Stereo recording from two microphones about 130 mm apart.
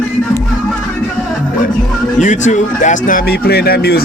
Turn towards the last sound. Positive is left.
turn(degrees=90)